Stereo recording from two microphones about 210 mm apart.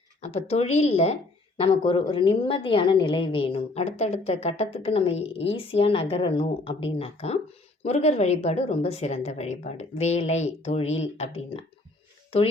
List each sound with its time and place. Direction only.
0.2 s a woman's voice: 30° left (ahead or behind)